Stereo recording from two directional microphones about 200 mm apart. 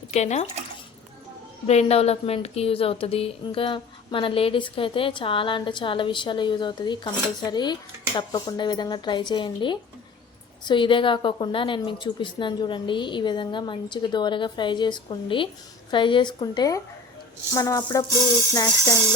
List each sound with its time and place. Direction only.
0.1 s speech: 35° left (ahead or behind)
1.6 s a woman's voice: 30° left (ahead or behind)
17.5 s music: 15° left (ahead or behind)